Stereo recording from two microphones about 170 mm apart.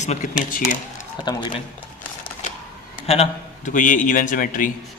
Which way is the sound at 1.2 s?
25° left (ahead or behind).